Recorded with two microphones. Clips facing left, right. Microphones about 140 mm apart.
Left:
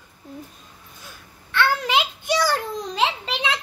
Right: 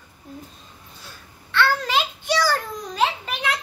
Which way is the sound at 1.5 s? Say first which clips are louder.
Even; 15° left (ahead or behind).